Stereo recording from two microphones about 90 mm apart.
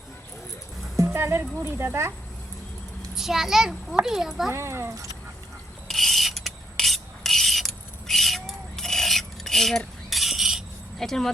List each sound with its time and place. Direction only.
0.9 s speech: 30° right (ahead or behind)
3.2 s a child's voice: 5° right (ahead or behind)
4.5 s speech: 30° right (ahead or behind)
5.9 s a sound: centre (ahead or behind)